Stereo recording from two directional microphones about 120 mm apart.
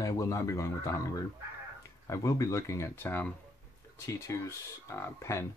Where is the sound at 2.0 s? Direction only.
30° left (ahead or behind).